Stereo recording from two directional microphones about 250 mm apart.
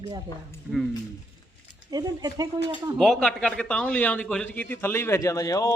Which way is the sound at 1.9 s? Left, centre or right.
Centre.